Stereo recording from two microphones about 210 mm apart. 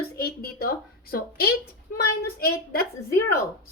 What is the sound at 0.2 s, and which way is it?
A woman's voice, 45° left (ahead or behind).